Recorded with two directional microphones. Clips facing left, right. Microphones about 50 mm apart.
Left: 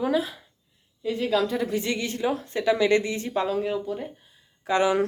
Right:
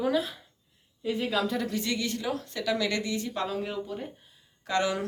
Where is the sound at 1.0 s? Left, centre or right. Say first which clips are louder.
Left 4 dB; centre.